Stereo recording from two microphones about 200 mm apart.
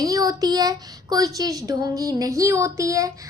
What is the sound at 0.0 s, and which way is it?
Speech, 20° right (ahead or behind).